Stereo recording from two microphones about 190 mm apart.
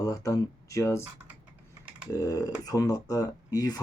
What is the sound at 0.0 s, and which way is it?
Speech, 20° left (ahead or behind).